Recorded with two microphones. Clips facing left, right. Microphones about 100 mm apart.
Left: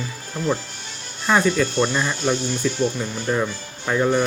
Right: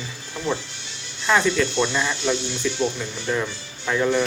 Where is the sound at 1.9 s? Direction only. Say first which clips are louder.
Left 1 dB; 10° left (ahead or behind).